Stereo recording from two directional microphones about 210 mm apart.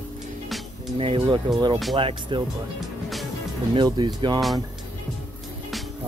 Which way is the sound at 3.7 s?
20° right (ahead or behind).